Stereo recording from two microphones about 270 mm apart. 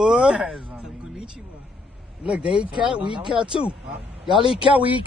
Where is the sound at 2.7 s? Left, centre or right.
Centre.